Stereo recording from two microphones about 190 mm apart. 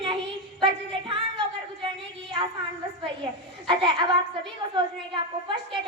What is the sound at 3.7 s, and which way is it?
A woman's voice, 25° right (ahead or behind).